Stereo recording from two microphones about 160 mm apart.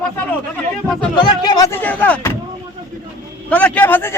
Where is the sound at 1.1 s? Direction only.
30° left (ahead or behind); by 2.3 s 10° left (ahead or behind).